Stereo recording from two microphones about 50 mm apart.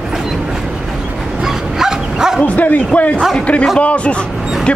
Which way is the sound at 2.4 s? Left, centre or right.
Left.